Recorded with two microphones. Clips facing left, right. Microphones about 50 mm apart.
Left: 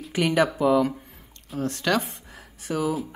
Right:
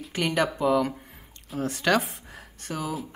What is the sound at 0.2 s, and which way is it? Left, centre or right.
A woman's voice, centre.